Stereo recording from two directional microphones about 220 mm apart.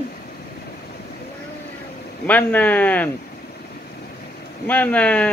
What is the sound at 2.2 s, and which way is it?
Speech, 5° left (ahead or behind).